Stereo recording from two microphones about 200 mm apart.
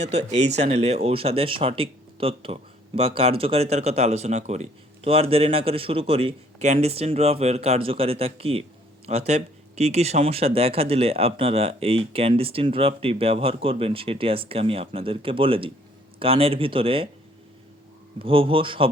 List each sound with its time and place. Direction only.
0.1 s speech: 35° right (ahead or behind)
18.2 s speech: 25° right (ahead or behind)